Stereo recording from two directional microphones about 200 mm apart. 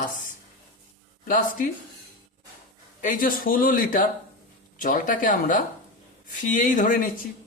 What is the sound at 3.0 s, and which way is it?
Speech, 45° left (ahead or behind).